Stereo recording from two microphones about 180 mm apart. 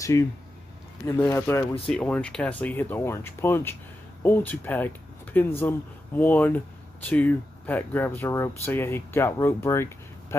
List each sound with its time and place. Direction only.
0.1 s speech: 15° left (ahead or behind)